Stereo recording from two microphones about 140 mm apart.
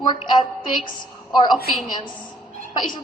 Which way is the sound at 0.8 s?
35° left (ahead or behind).